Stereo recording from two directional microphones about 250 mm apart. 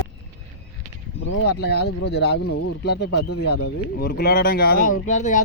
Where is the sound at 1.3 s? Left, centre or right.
Left.